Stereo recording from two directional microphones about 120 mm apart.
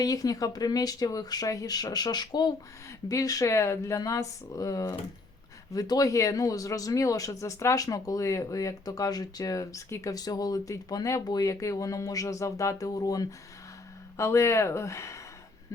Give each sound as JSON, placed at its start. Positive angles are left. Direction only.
{"t": 0.0, "sound": "speech", "side_deg": 30}